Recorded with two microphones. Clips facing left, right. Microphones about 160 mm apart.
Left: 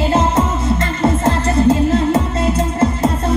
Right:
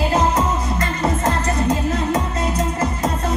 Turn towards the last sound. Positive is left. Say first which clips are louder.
# left 5 dB
turn(degrees=30)  # may be behind; listen again after turning